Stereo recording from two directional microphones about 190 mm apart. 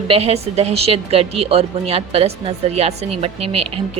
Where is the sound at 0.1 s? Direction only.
35° right (ahead or behind).